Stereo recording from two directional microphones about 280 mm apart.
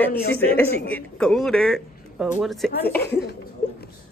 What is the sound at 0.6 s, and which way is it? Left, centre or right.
A woman's voice, centre.